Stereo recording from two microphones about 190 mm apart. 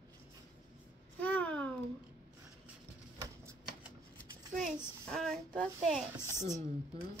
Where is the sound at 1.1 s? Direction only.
10° left (ahead or behind).